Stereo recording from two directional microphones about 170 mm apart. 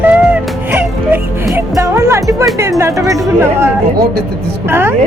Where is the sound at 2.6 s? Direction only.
15° right (ahead or behind).